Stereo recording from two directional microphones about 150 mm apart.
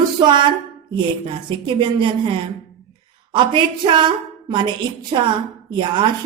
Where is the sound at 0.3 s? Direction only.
30° right (ahead or behind).